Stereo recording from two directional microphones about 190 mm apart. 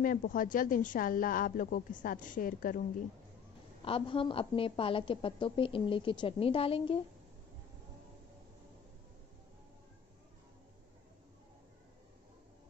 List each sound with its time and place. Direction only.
0.0 s a woman's voice: 45° left (ahead or behind)
3.8 s a woman's voice: 30° left (ahead or behind)